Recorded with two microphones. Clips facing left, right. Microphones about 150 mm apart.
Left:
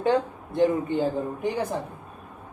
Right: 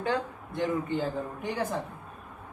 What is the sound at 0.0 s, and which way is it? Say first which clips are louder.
Speech: left 7 dB; 20° left (ahead or behind).